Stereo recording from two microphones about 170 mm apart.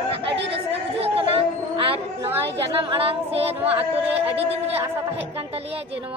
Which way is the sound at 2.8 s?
35° right (ahead or behind).